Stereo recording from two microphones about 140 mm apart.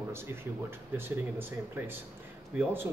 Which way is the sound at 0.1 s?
15° right (ahead or behind).